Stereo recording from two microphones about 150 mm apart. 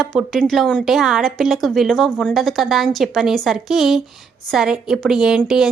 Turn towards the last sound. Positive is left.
turn(degrees=-5)  # may be behind; listen again after turning